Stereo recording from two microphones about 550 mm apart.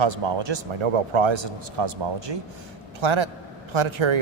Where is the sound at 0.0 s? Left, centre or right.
Right.